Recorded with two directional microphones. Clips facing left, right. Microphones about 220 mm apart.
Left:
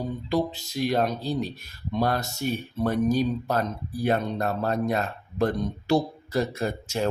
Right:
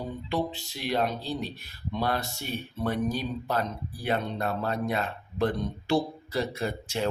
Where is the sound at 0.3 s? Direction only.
40° left (ahead or behind).